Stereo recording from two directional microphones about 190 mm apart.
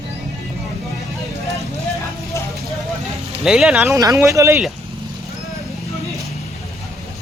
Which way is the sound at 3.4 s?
5° right (ahead or behind).